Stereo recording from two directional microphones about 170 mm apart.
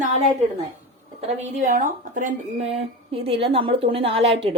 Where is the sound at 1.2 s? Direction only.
45° right (ahead or behind).